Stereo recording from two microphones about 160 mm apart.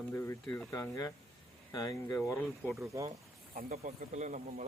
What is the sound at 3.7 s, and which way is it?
Speech, 45° right (ahead or behind).